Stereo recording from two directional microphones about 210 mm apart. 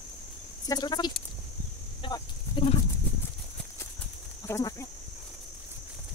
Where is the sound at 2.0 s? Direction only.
25° left (ahead or behind).